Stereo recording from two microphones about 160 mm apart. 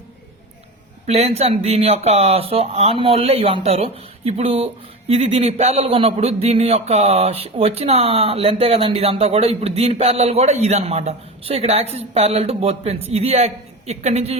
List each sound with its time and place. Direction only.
1.0 s speech: 40° right (ahead or behind)